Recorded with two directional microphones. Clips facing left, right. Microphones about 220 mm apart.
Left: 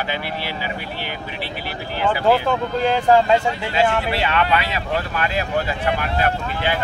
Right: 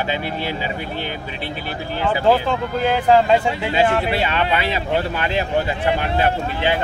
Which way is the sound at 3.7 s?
25° right (ahead or behind).